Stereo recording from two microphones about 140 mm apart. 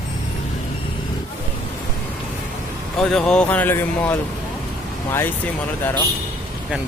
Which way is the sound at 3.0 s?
5° left (ahead or behind).